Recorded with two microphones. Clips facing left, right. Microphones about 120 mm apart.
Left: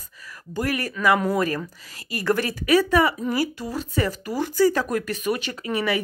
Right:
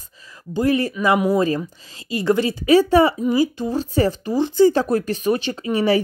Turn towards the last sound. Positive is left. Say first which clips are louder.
# right 6 dB
turn(degrees=-30)  # may be behind; listen again after turning